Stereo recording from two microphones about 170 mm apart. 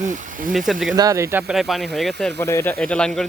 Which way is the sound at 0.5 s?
Centre (ahead or behind).